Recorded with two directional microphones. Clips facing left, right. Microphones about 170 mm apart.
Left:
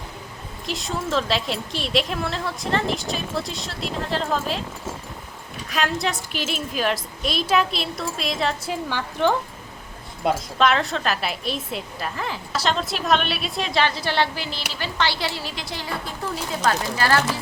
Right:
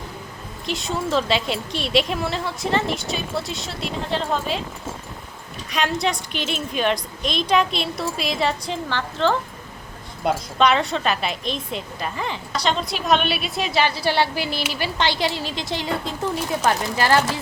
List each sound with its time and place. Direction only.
0.6 s a woman's voice: centre (ahead or behind)
5.6 s a woman's voice: centre (ahead or behind)
10.2 s a woman's voice: centre (ahead or behind); by 17.2 s 15° right (ahead or behind)